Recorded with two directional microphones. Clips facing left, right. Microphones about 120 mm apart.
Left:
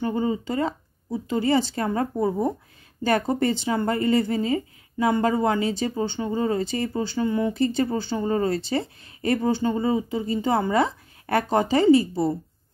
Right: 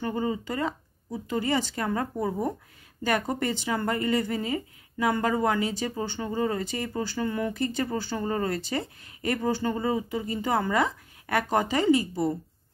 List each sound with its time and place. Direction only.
0.0 s speech: 25° left (ahead or behind)